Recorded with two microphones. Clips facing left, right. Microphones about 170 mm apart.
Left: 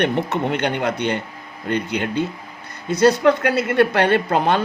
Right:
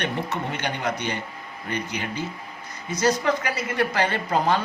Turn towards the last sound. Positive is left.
turn(degrees=65)  # may be behind; listen again after turning